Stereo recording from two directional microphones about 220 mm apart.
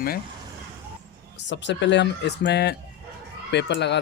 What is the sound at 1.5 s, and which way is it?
Speech, 55° left (ahead or behind).